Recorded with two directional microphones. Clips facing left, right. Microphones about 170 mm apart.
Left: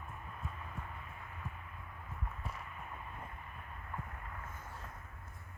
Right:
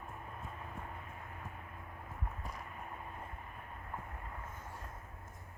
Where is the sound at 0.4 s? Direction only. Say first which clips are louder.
Left 1 dB; 40° right (ahead or behind).